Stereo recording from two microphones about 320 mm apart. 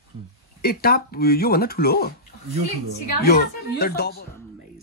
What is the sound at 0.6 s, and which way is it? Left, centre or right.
Speech, left.